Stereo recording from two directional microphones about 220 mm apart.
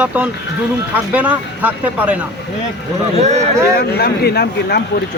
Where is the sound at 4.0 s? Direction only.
45° left (ahead or behind).